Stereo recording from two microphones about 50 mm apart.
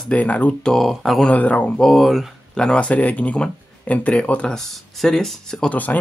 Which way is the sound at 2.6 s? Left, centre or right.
Centre.